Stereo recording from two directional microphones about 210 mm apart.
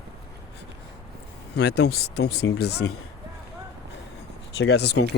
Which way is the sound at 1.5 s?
50° left (ahead or behind).